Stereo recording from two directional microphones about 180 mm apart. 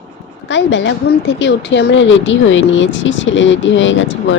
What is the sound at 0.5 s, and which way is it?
Speech, 90° left.